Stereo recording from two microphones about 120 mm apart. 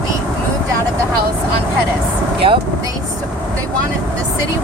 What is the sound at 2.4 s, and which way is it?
Speech, 50° right (ahead or behind).